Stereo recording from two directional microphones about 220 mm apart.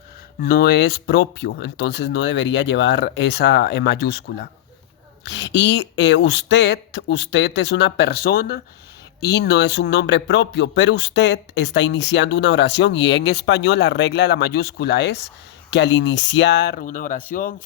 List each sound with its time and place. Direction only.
0.4 s a man's voice: 45° left (ahead or behind)